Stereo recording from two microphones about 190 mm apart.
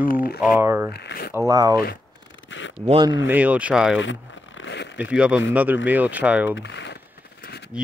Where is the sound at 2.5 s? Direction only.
75° left (ahead or behind).